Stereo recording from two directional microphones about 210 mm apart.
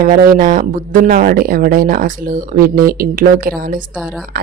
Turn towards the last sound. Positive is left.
turn(degrees=-40)  # may be behind; listen again after turning